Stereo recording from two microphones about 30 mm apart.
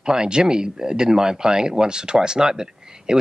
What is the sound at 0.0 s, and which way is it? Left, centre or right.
Speech, right.